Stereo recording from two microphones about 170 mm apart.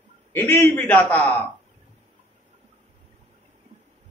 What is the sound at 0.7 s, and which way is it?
Speech, 10° left (ahead or behind).